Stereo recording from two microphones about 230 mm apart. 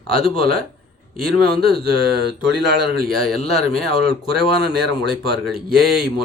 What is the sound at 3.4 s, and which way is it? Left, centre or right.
Speech, left.